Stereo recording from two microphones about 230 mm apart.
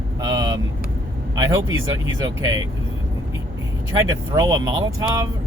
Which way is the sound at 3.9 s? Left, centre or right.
Centre.